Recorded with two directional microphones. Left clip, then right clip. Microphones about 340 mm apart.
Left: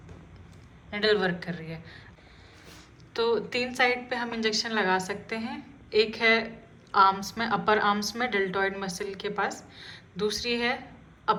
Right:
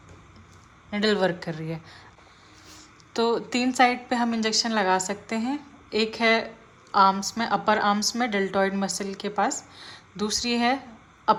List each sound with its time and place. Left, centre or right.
0.9 s a woman's voice: right
3.1 s a woman's voice: right
11.3 s a sound: right